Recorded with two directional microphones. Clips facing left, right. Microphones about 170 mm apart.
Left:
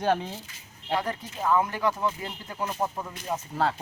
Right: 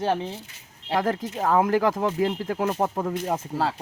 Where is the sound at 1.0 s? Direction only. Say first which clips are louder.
Right 6 dB; 90° right; by 3.4 s 55° right (ahead or behind).